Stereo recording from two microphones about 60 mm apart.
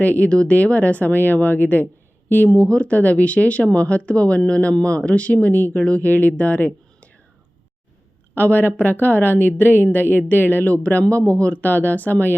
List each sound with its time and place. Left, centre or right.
0.0 s speech: left
2.5 s speech: centre
8.4 s speech: left